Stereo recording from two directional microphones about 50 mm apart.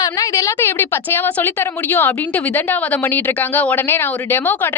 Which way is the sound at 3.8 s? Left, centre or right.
Left.